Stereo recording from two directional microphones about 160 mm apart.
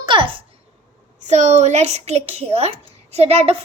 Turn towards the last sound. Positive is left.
turn(degrees=-40)  # may be behind; listen again after turning